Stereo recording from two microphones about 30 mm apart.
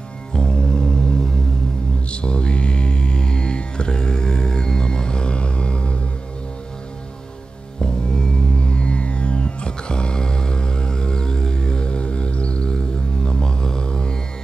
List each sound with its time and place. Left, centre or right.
0.3 s music: left
2.0 s music: left
7.8 s music: left
8.5 s music: left
12.6 s music: left